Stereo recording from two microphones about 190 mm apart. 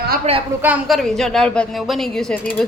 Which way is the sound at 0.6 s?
5° right (ahead or behind).